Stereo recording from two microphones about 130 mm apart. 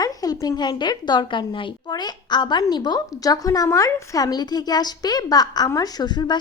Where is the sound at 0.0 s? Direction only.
30° left (ahead or behind).